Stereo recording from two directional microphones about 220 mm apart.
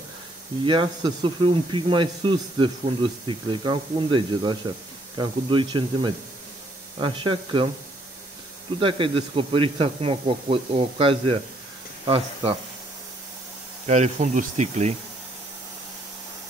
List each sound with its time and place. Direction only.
0.7 s speech: 20° right (ahead or behind)
8.7 s speech: 25° right (ahead or behind)
13.8 s speech: 30° right (ahead or behind)